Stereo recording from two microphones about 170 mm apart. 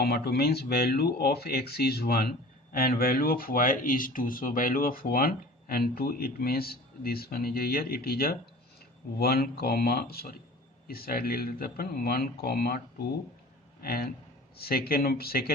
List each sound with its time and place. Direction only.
0.0 s speech: 65° left (ahead or behind)
13.8 s speech: 65° left (ahead or behind)